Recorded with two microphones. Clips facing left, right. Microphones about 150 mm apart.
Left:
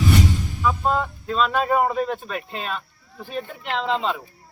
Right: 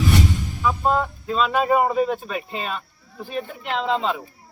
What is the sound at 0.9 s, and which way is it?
Speech, centre (ahead or behind).